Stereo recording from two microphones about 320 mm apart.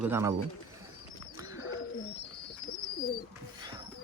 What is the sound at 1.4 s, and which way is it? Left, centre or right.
Bird, centre.